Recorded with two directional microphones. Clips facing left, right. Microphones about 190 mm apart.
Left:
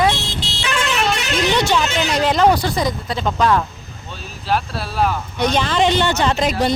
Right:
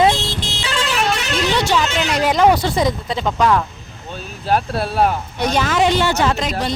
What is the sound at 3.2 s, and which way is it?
Speech, centre (ahead or behind).